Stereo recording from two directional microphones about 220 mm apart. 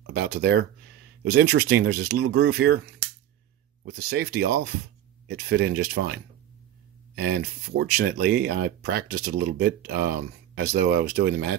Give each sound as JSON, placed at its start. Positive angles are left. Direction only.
{"t": 0.0, "sound": "speech", "side_deg": -45}
{"t": 3.8, "sound": "speech", "side_deg": -45}